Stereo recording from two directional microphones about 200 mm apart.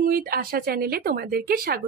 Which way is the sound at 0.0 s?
45° right (ahead or behind).